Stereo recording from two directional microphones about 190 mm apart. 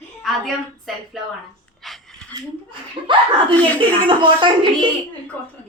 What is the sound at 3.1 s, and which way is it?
Speech, 25° right (ahead or behind).